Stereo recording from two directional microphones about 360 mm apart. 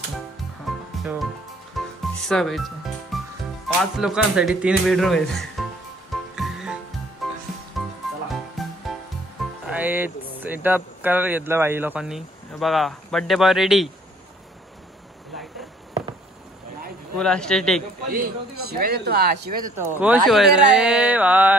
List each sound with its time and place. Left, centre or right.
0.7 s music: centre
2.1 s speech: centre
6.1 s music: centre
9.4 s speech: centre
17.2 s speech: centre
18.1 s a man's voice: right
19.8 s speech: centre